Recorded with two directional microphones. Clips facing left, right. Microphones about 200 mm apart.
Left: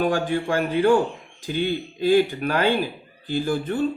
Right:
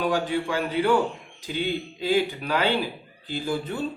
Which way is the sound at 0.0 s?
50° left (ahead or behind).